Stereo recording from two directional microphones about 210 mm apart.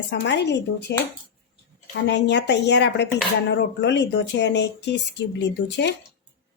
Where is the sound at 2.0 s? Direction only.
55° left (ahead or behind).